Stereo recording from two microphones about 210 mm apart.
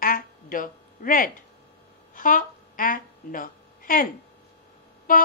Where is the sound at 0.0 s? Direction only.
40° left (ahead or behind).